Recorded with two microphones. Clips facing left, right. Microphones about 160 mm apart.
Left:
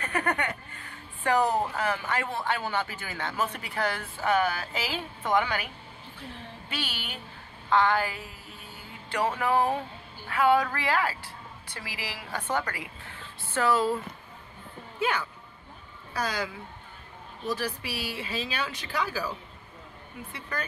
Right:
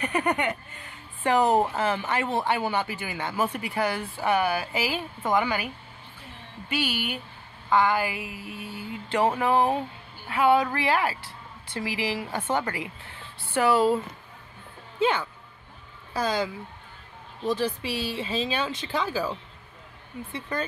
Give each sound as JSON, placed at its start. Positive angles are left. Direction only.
{"t": 0.0, "sound": "a woman's voice", "side_deg": -15}
{"t": 6.7, "sound": "a woman's voice", "side_deg": -10}
{"t": 9.1, "sound": "a woman's voice", "side_deg": -25}
{"t": 15.0, "sound": "speech", "side_deg": -25}
{"t": 17.5, "sound": "speech", "side_deg": -25}
{"t": 20.3, "sound": "speech", "side_deg": -25}